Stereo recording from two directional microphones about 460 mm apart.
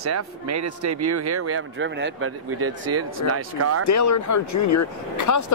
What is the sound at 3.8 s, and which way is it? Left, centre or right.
Speech, left.